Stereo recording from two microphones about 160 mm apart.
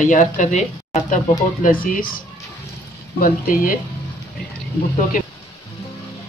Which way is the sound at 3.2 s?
65° left (ahead or behind).